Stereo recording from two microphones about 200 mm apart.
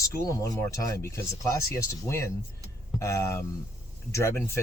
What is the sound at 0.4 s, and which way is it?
Speech, 15° left (ahead or behind).